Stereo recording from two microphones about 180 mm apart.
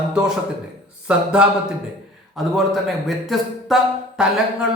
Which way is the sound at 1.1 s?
5° right (ahead or behind).